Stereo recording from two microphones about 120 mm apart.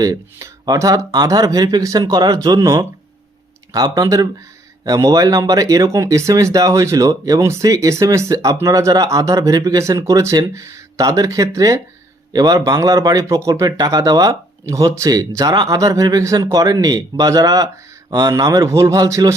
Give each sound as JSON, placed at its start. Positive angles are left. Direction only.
{"t": 0.0, "sound": "speech", "side_deg": -25}
{"t": 3.8, "sound": "a man's voice", "side_deg": -35}